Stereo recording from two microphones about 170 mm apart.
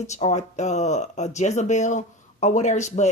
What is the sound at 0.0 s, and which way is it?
Speech, 40° left (ahead or behind).